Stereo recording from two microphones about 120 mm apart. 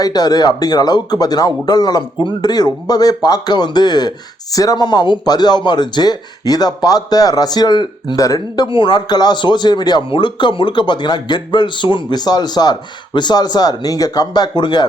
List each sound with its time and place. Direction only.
0.0 s a man's voice: 30° left (ahead or behind)
8.6 s a man's voice: 40° left (ahead or behind)